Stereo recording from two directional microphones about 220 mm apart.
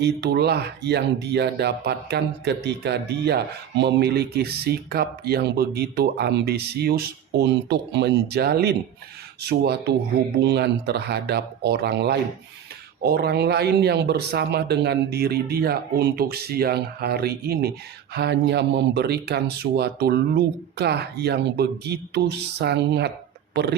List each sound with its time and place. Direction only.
0.0 s speech: 50° right (ahead or behind)